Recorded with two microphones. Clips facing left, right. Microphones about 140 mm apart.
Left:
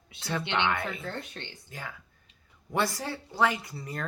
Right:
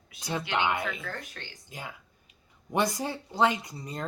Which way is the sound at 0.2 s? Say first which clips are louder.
Even; 15° right (ahead or behind).